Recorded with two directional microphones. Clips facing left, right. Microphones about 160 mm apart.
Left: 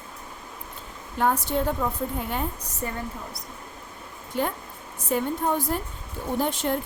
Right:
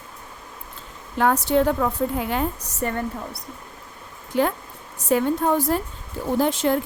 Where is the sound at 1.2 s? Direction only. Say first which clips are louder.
Right 5 dB; 90° right; by 3.4 s 65° right (ahead or behind).